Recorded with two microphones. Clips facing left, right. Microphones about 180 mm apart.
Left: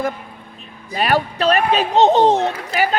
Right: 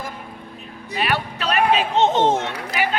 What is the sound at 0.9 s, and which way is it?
Speech, 40° left (ahead or behind).